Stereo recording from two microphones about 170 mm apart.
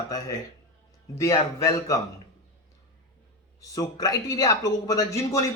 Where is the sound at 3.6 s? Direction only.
20° left (ahead or behind).